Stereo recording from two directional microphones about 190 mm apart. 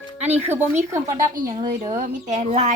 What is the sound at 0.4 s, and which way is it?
Speech, 10° right (ahead or behind).